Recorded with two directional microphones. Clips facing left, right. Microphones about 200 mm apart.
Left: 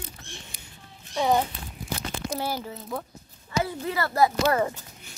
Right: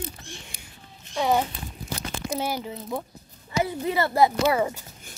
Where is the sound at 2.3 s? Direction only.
20° right (ahead or behind).